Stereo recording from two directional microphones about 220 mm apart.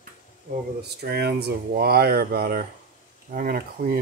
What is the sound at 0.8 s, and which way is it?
Speech, 45° right (ahead or behind).